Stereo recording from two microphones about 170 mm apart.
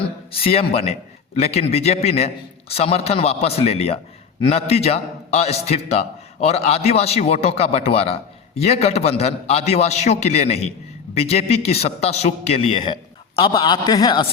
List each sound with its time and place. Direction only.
0.0 s a man's voice: 35° left (ahead or behind)